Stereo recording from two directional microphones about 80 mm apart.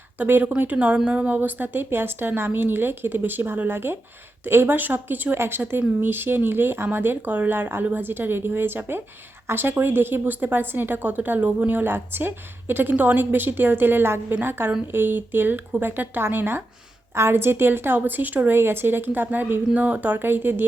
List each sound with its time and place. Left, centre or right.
0.2 s a woman's voice: right